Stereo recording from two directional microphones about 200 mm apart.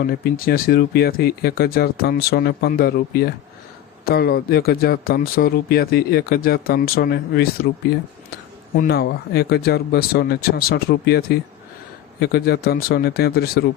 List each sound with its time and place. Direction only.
0.0 s a man's voice: 50° left (ahead or behind)
8.8 s a man's voice: 55° left (ahead or behind)